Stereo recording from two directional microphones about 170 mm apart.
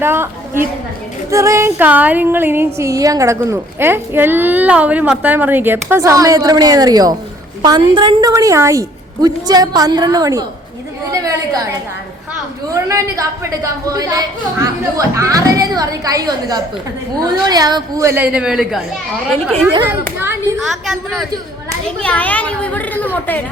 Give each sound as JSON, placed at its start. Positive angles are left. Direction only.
{"t": 0.0, "sound": "a woman's voice", "side_deg": -15}
{"t": 1.3, "sound": "music", "side_deg": -15}
{"t": 7.6, "sound": "a woman's voice", "side_deg": -25}
{"t": 12.7, "sound": "a woman's voice", "side_deg": -20}
{"t": 17.5, "sound": "music", "side_deg": -25}
{"t": 19.9, "sound": "music", "side_deg": -10}
{"t": 20.6, "sound": "a woman's voice", "side_deg": 0}